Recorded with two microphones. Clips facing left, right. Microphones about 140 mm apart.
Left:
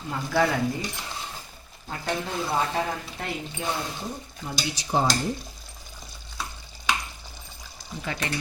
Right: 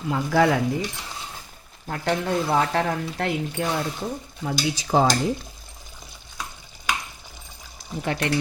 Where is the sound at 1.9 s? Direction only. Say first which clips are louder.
Right 6 dB; 65° right (ahead or behind).